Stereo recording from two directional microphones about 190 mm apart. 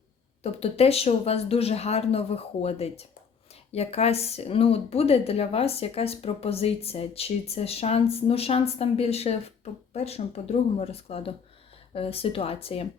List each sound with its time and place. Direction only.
0.4 s speech: 30° left (ahead or behind)